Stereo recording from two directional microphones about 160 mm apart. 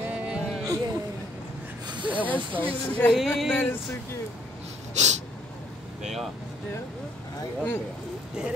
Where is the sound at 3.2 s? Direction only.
Centre (ahead or behind).